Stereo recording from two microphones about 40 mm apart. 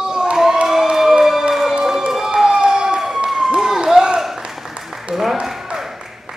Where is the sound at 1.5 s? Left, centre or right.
Centre.